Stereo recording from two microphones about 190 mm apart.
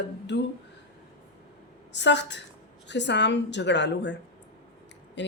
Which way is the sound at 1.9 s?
65° left (ahead or behind).